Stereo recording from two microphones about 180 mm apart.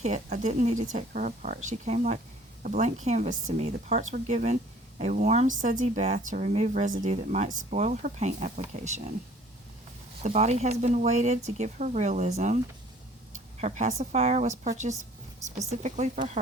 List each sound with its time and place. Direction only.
0.0 s speech: 40° right (ahead or behind)
10.2 s speech: 40° right (ahead or behind)
13.6 s speech: 40° right (ahead or behind)